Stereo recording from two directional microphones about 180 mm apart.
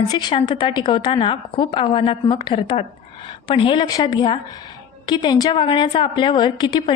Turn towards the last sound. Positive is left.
turn(degrees=25)  # may be behind; listen again after turning